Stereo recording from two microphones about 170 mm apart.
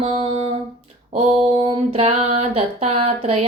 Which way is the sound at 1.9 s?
40° right (ahead or behind).